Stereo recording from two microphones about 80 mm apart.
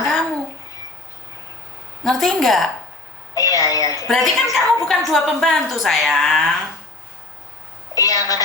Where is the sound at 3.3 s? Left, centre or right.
Left.